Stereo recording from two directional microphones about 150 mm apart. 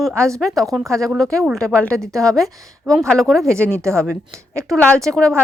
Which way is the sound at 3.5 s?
15° right (ahead or behind).